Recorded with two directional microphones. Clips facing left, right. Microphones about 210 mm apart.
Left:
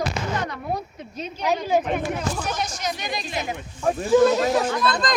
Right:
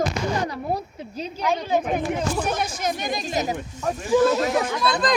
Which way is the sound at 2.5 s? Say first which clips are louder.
Right 3 dB; 50° right (ahead or behind).